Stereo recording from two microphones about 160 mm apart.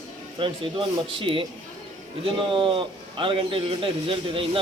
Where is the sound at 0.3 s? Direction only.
35° right (ahead or behind).